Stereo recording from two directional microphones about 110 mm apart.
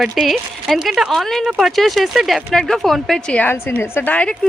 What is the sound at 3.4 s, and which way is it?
A woman's voice, 20° left (ahead or behind).